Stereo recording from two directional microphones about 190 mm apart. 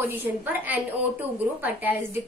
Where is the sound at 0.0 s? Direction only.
10° right (ahead or behind).